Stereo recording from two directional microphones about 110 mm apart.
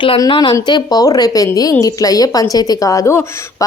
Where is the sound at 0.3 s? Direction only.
45° left (ahead or behind).